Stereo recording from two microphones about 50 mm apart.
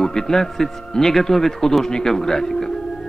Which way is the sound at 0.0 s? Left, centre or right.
Centre.